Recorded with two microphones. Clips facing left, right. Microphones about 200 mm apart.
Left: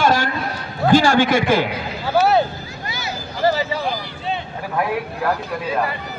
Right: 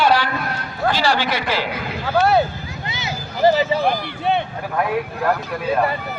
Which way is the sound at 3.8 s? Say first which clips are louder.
Right 5 dB; 60° right (ahead or behind).